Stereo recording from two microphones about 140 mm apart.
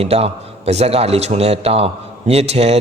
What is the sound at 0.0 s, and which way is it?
A man's voice, 45° right (ahead or behind).